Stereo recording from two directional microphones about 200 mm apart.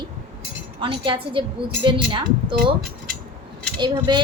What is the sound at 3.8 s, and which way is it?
Speech, 20° right (ahead or behind).